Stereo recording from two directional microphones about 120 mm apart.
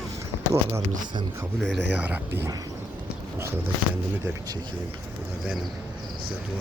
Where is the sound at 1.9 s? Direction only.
15° right (ahead or behind).